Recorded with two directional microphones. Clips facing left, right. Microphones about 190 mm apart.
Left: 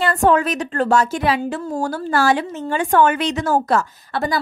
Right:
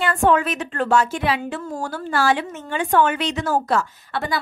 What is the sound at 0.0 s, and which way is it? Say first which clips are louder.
A woman's voice: left 2 dB; 40° left (ahead or behind).